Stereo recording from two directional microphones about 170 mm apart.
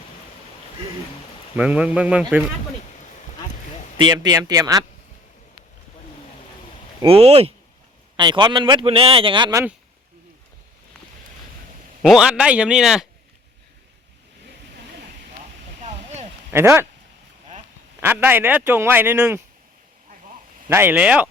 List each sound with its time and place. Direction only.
1.5 s speech: 5° right (ahead or behind)
3.9 s speech: 30° right (ahead or behind)
7.0 s speech: 35° right (ahead or behind)
12.0 s speech: 5° right (ahead or behind)
15.8 s a sound: 40° right (ahead or behind)
16.5 s speech: 15° right (ahead or behind)
18.0 s speech: 10° right (ahead or behind)
20.7 s speech: 10° right (ahead or behind)